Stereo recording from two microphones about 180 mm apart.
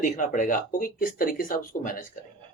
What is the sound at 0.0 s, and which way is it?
Speech, 45° left (ahead or behind).